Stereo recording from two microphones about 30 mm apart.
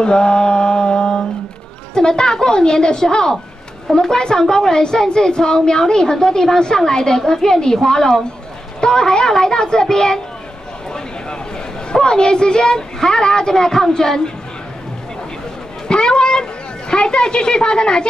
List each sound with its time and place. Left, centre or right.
0.0 s mantra: left
2.0 s a woman's voice: left
11.9 s a woman's voice: left
15.9 s children playing: left
16.9 s a woman's voice: left